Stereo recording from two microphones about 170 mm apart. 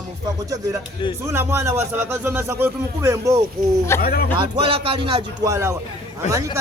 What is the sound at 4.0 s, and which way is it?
Speech, 65° left (ahead or behind).